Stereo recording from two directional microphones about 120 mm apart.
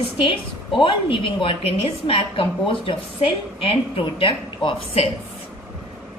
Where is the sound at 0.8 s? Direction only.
45° left (ahead or behind).